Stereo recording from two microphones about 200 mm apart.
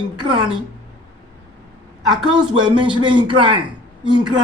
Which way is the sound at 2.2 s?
25° right (ahead or behind).